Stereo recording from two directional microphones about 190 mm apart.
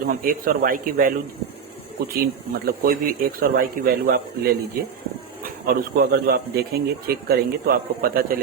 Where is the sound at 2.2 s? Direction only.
50° right (ahead or behind).